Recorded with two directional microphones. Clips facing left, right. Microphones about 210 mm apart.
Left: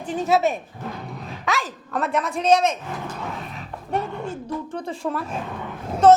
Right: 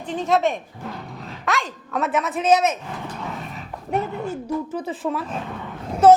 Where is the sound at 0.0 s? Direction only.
5° left (ahead or behind).